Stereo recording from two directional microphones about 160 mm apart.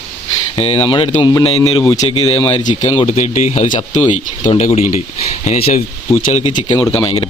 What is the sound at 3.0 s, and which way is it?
Speech, 45° left (ahead or behind).